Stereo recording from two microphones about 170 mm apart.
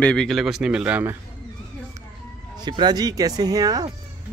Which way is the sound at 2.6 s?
25° right (ahead or behind).